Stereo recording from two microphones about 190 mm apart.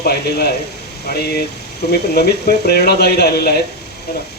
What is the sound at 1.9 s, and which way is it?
Speech, 55° left (ahead or behind).